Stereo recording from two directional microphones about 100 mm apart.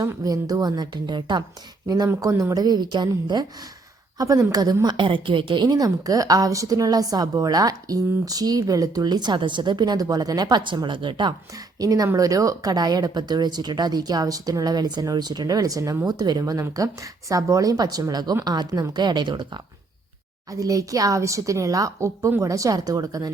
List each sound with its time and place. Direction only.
0.0 s a woman's voice: 35° right (ahead or behind)
2.2 s a woman's voice: 35° right (ahead or behind)
4.2 s a woman's voice: 35° right (ahead or behind); by 5.6 s 55° right (ahead or behind)
5.6 s a woman's voice: 35° right (ahead or behind)
20.5 s a woman's voice: 35° right (ahead or behind)